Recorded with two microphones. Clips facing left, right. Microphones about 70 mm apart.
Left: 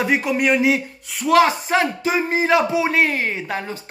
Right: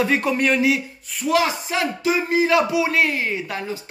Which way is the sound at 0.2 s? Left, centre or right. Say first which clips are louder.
Left 1 dB; centre.